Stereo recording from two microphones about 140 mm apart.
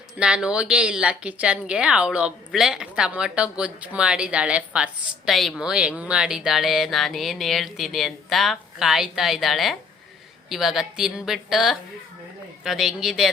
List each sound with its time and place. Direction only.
0.2 s a woman's voice: 5° right (ahead or behind)